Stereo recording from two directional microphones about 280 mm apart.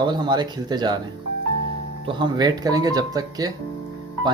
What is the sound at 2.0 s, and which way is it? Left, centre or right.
Speech, centre.